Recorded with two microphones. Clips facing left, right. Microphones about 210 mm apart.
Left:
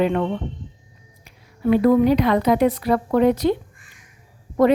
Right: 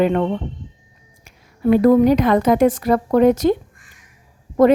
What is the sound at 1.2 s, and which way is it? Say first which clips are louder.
A woman's voice: right 3 dB; 45° right (ahead or behind).